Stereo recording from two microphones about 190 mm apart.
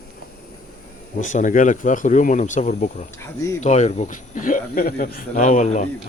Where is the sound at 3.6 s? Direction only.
40° left (ahead or behind).